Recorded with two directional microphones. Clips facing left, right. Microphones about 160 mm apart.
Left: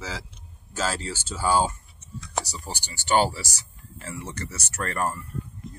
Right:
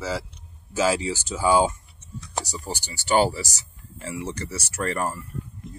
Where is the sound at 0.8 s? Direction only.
10° right (ahead or behind).